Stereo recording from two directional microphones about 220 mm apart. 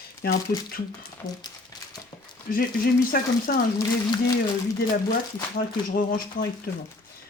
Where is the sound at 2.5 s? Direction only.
40° left (ahead or behind).